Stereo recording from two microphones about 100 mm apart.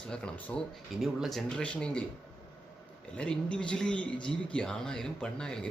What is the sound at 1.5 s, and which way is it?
Speech, 10° left (ahead or behind).